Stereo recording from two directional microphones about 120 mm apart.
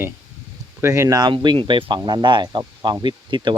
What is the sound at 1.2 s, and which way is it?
Speech, 40° right (ahead or behind).